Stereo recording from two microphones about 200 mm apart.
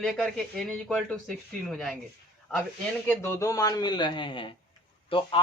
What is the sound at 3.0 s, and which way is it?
A man's voice, 15° left (ahead or behind).